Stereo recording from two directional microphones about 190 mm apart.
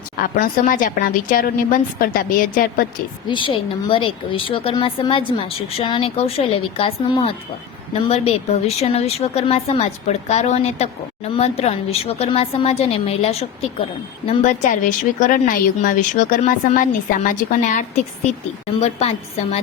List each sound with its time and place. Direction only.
0.2 s speech: 50° left (ahead or behind)
3.2 s speech: 25° left (ahead or behind)